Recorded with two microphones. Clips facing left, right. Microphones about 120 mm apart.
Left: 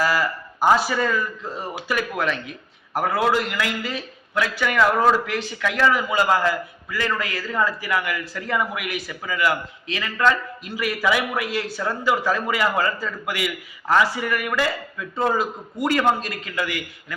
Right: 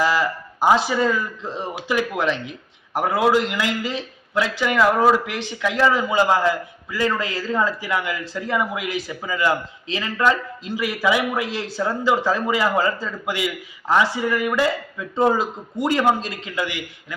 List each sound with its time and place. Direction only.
0.0 s a man's voice: 20° right (ahead or behind)